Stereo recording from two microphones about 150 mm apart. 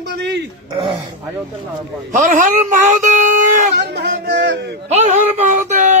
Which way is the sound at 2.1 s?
60° right (ahead or behind).